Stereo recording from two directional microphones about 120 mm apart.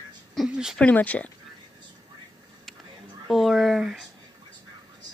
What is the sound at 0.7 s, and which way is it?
Speech, 10° left (ahead or behind).